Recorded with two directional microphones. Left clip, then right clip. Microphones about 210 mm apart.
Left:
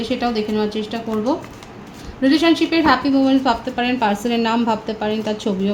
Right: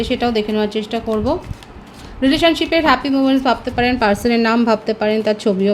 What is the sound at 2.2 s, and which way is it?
A woman's voice, 55° right (ahead or behind).